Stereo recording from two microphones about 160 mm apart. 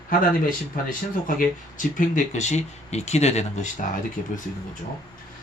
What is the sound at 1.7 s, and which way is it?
Speech, 50° left (ahead or behind).